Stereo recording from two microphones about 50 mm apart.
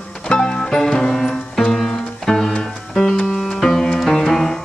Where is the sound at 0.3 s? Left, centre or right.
Left.